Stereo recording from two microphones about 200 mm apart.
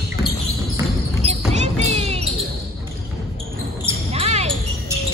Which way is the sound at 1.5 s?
35° right (ahead or behind).